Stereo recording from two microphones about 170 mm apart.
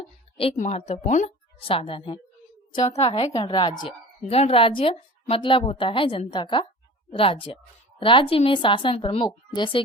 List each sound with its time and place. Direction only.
0.5 s a woman's voice: 40° left (ahead or behind); by 3.8 s 25° left (ahead or behind)
4.3 s a woman's voice: 35° left (ahead or behind)